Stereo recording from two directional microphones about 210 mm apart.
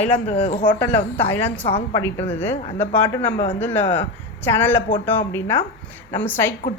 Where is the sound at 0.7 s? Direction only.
10° left (ahead or behind).